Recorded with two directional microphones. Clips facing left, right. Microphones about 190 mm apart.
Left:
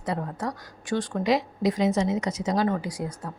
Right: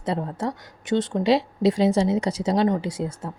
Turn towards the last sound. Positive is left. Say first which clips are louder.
# right 4 dB
turn(degrees=-25)  # may be behind; listen again after turning